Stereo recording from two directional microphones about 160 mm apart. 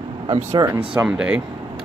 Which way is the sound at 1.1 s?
5° right (ahead or behind).